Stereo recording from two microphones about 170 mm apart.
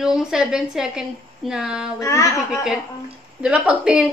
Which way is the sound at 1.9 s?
20° left (ahead or behind).